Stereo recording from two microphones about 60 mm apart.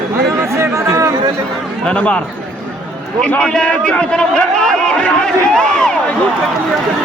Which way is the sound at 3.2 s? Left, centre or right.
Centre.